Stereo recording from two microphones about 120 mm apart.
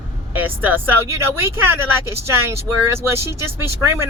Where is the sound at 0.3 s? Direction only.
15° right (ahead or behind).